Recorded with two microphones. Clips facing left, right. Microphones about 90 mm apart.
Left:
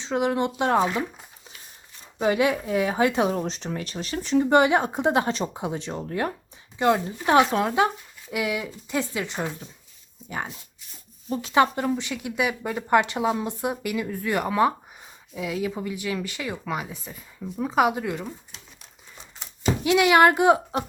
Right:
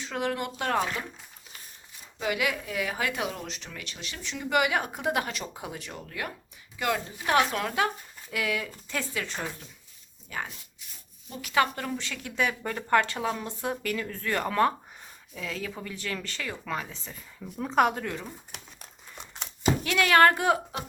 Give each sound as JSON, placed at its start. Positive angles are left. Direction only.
{"t": 0.0, "sound": "speech", "side_deg": 20}
{"t": 2.2, "sound": "speech", "side_deg": 30}
{"t": 19.8, "sound": "speech", "side_deg": 15}